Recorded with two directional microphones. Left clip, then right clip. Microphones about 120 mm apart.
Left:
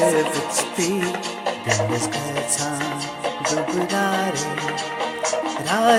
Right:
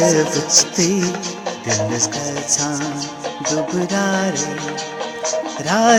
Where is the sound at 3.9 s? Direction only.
30° right (ahead or behind).